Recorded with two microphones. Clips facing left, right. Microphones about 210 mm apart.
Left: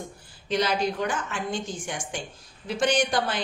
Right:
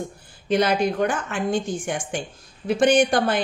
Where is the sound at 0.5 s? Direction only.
55° right (ahead or behind).